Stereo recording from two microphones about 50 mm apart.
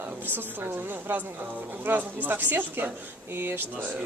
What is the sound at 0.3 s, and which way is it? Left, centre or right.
A woman's voice, right.